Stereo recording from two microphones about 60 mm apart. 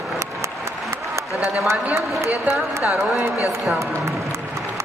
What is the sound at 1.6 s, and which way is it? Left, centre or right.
Speech, right.